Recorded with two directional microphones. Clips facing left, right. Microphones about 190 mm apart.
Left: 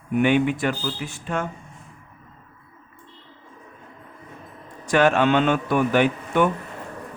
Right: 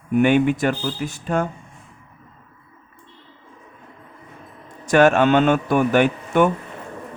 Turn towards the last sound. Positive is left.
turn(degrees=-50)  # may be behind; listen again after turning